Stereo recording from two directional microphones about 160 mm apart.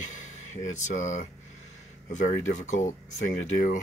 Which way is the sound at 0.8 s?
50° left (ahead or behind).